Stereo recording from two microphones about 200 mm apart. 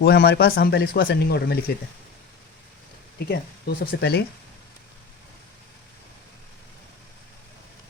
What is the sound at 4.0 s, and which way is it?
Speech, 55° left (ahead or behind).